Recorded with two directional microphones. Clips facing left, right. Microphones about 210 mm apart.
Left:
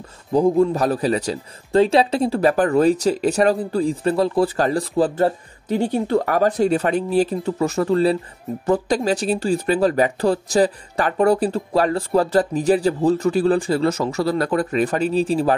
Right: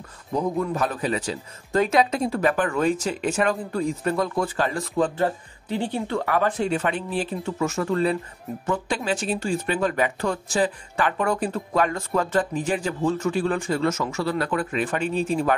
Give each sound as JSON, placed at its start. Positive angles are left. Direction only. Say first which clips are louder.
{"t": 0.3, "sound": "speech", "louder": "left 8 dB", "side_deg": 30}